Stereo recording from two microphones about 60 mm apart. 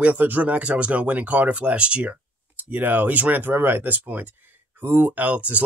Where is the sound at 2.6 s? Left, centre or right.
Right.